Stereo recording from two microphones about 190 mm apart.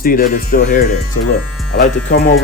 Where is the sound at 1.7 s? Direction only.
55° left (ahead or behind).